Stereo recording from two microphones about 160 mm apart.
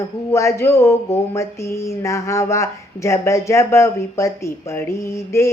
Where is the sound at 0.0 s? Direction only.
15° left (ahead or behind).